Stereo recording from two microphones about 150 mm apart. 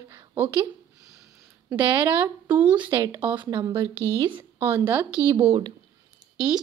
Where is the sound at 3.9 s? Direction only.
15° left (ahead or behind).